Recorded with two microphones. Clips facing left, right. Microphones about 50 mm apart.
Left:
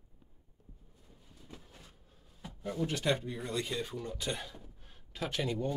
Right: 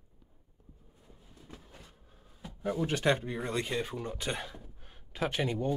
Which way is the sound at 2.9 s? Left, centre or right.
Right.